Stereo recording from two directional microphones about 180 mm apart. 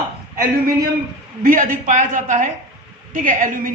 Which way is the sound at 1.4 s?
50° right (ahead or behind).